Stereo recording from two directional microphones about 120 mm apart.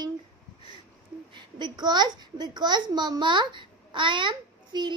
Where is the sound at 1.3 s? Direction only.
40° right (ahead or behind).